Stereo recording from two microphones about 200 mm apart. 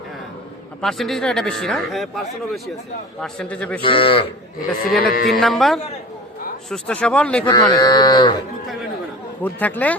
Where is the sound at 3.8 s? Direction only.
25° left (ahead or behind).